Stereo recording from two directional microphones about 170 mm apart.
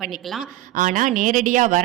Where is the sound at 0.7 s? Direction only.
50° right (ahead or behind).